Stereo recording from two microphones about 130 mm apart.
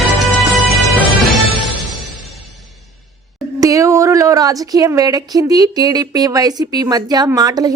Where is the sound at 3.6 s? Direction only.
25° right (ahead or behind).